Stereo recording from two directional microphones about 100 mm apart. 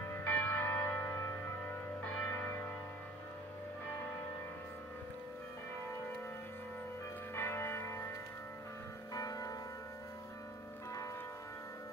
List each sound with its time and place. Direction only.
0.1 s music: 15° left (ahead or behind)
7.3 s church bell: 25° left (ahead or behind)
9.1 s music: 40° left (ahead or behind)